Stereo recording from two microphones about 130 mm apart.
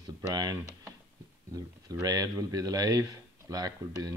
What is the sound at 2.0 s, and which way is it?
Speech, 30° right (ahead or behind).